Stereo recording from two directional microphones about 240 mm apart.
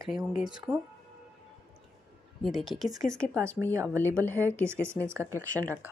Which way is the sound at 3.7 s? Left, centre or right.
Centre.